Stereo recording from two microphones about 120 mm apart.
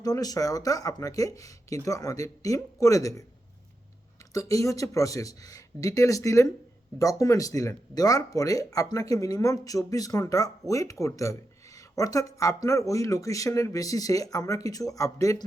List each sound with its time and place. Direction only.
0.0 s speech: 30° left (ahead or behind)